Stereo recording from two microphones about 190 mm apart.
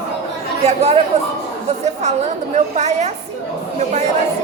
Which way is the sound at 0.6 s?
35° right (ahead or behind).